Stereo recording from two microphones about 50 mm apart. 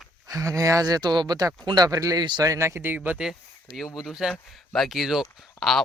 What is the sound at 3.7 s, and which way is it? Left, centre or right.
Speech, centre.